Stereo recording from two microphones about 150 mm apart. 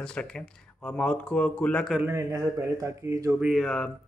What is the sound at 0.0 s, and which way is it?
Speech, 5° left (ahead or behind).